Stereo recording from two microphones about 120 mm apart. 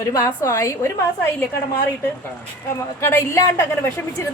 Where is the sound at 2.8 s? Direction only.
25° left (ahead or behind).